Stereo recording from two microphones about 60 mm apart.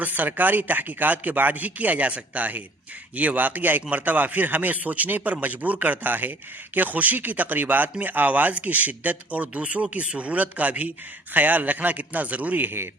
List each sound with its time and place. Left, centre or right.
0.0 s a man's voice: right